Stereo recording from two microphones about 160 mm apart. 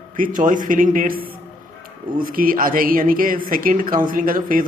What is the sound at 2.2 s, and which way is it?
Speech, 60° right (ahead or behind).